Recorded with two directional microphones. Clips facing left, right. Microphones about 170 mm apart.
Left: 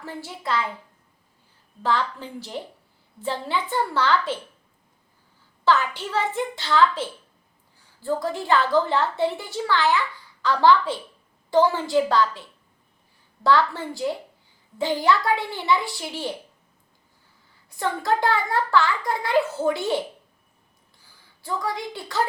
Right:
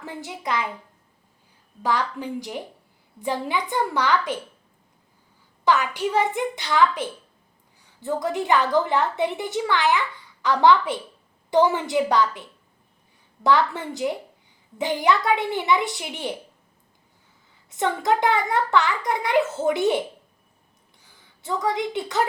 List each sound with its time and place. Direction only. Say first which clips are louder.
0.0 s a child's voice: right 1 dB; 20° right (ahead or behind)
1.8 s a child's voice: even; 15° right (ahead or behind)
5.6 s a child's voice: right 1 dB; 15° right (ahead or behind)
17.7 s a woman's voice: right 2 dB; 20° right (ahead or behind)
21.4 s a woman's voice: right 4 dB; 20° right (ahead or behind)